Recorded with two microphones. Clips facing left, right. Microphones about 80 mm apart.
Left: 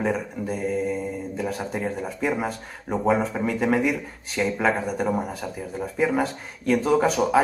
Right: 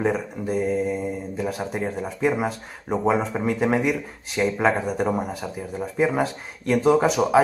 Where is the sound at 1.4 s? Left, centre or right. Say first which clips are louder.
Right 1 dB; centre.